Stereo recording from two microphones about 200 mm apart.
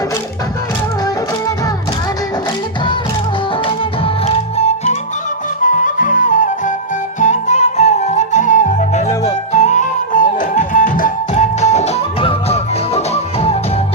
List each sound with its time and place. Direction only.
3.7 s music: 30° left (ahead or behind)